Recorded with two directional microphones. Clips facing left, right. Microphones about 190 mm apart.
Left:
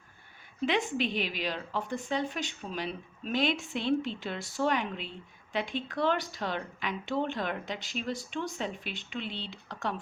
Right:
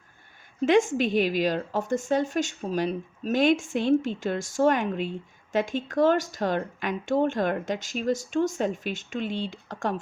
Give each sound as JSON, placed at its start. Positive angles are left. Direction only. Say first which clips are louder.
{"t": 0.6, "sound": "a woman's voice", "louder": "right 8 dB", "side_deg": -45}